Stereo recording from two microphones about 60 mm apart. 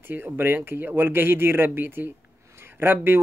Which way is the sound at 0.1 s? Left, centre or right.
Right.